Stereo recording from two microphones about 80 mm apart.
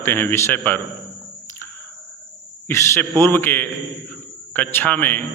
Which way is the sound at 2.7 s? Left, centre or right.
Left.